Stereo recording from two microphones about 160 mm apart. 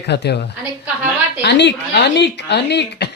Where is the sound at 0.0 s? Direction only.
90° left.